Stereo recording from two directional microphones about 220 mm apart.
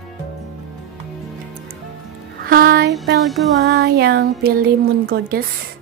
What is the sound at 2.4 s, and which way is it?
Speech, 40° right (ahead or behind).